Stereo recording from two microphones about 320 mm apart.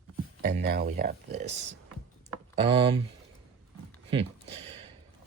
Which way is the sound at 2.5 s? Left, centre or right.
Centre.